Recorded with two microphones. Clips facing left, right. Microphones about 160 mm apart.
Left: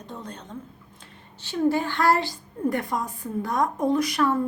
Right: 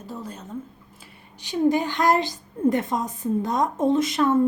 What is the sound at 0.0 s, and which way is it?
A woman's voice, 5° right (ahead or behind).